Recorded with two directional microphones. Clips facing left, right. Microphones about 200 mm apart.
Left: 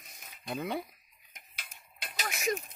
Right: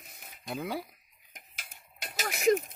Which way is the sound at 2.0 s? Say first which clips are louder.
Right 3 dB; 40° right (ahead or behind).